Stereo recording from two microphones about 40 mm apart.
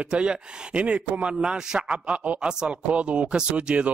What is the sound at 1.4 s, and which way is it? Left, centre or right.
Speech, centre.